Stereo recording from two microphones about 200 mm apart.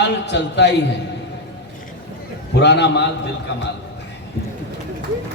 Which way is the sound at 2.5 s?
60° left (ahead or behind).